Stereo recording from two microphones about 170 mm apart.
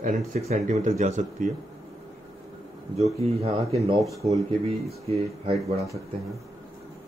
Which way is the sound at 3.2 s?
35° right (ahead or behind).